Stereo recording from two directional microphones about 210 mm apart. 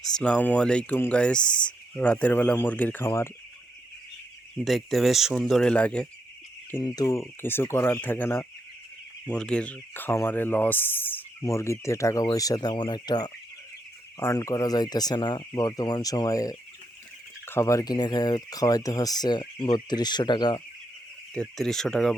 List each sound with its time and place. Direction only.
0.0 s speech: 5° left (ahead or behind)
4.6 s speech: centre (ahead or behind)
6.8 s speech: 20° left (ahead or behind)
21.3 s speech: centre (ahead or behind)